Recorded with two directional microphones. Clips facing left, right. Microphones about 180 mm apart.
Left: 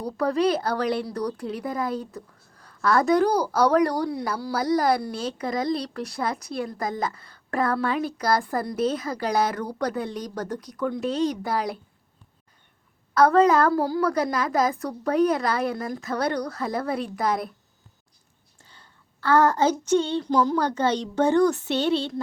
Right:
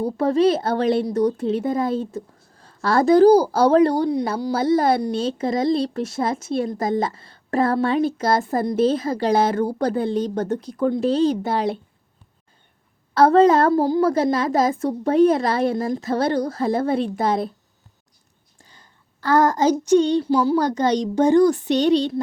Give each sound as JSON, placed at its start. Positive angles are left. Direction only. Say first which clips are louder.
{"t": 0.0, "sound": "speech", "louder": "right 5 dB", "side_deg": -25}
{"t": 13.1, "sound": "speech", "louder": "right 4 dB", "side_deg": -25}
{"t": 18.7, "sound": "a sound", "louder": "left 2 dB", "side_deg": -15}
{"t": 19.8, "sound": "a child's voice", "louder": "right 6 dB", "side_deg": -15}